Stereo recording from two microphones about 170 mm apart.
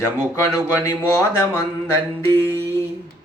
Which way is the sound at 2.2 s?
15° left (ahead or behind).